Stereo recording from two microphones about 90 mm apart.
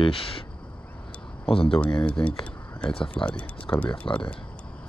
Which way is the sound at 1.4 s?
80° left.